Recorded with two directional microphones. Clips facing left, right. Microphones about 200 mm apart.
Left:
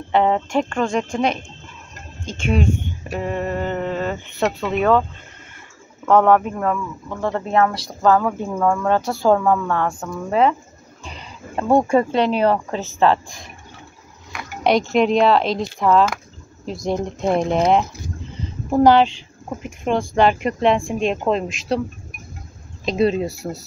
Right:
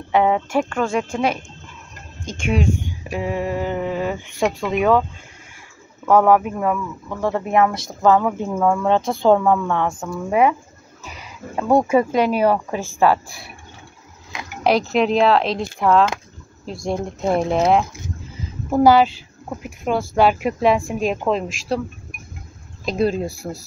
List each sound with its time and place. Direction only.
0.1 s speech: 10° right (ahead or behind)
6.0 s speech: 5° right (ahead or behind)
8.5 s speech: 5° right (ahead or behind)
8.8 s speech: 20° right (ahead or behind)
9.3 s speech: centre (ahead or behind)
11.1 s a sound: 10° right (ahead or behind)
11.7 s speech: 10° right (ahead or behind)
14.6 s speech: centre (ahead or behind)
22.8 s speech: centre (ahead or behind)